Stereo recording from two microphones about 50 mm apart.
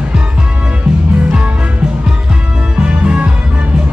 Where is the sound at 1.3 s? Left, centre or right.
Right.